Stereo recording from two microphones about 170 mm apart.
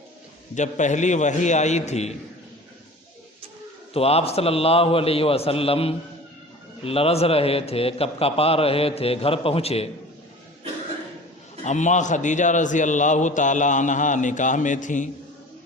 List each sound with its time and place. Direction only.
0.5 s a man's voice: 45° left (ahead or behind)
3.9 s a man's voice: 35° left (ahead or behind)
11.6 s a man's voice: 45° left (ahead or behind)